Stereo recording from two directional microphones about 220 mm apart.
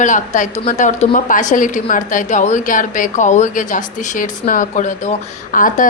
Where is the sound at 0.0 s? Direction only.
35° left (ahead or behind).